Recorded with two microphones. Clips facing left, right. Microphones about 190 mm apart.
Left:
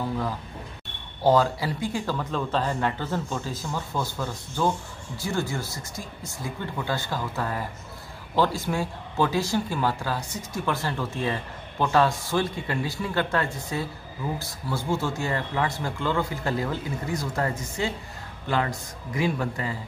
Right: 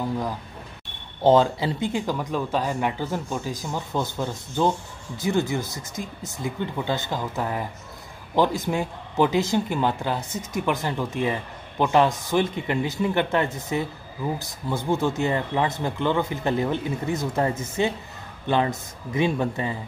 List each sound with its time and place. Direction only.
1.2 s speech: 25° right (ahead or behind)